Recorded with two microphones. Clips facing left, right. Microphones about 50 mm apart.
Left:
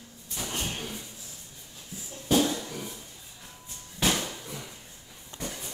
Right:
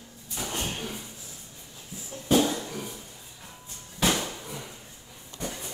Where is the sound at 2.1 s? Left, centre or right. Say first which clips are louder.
Right 2 dB; right.